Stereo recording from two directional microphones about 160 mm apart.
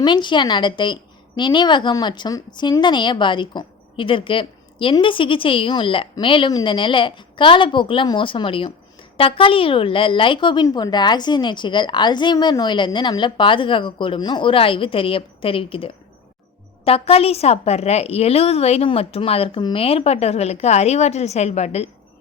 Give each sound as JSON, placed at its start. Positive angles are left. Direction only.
{"t": 0.0, "sound": "a woman's voice", "side_deg": 30}